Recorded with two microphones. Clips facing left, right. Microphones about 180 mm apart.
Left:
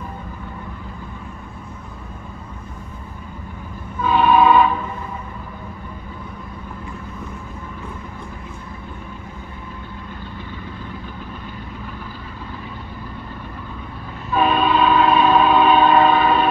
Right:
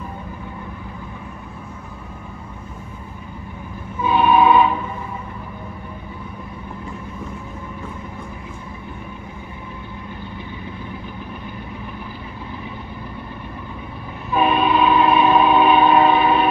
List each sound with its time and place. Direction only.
4.0 s train: 15° right (ahead or behind)
14.3 s train: 15° right (ahead or behind)